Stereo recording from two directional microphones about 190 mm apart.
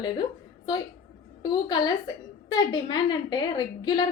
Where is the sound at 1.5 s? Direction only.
20° left (ahead or behind).